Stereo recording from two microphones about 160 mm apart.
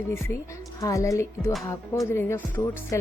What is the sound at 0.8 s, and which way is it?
Speech, 20° left (ahead or behind).